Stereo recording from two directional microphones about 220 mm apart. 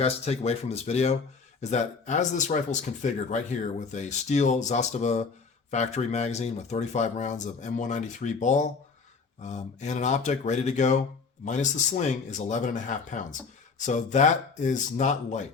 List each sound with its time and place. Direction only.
0.0 s speech: 30° left (ahead or behind)